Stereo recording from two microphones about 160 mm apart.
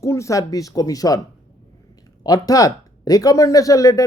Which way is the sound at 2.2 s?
25° left (ahead or behind).